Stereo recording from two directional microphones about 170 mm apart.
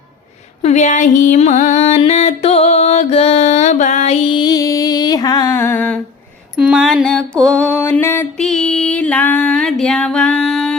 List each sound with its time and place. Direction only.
0.6 s music: 40° left (ahead or behind); by 6.0 s 10° left (ahead or behind)
6.6 s mantra: 5° right (ahead or behind); by 8.4 s 15° left (ahead or behind)
8.4 s female singing: 5° left (ahead or behind)